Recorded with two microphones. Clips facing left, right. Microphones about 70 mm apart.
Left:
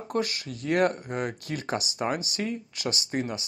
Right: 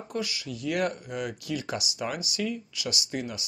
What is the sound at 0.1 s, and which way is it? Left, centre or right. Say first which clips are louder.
Speech: left 4 dB; left.